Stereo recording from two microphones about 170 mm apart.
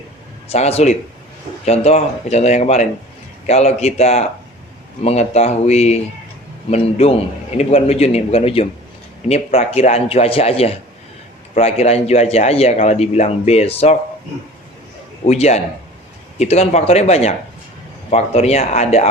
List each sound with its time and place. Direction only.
0.4 s a man's voice: 40° left (ahead or behind)
15.3 s a man's voice: 40° left (ahead or behind)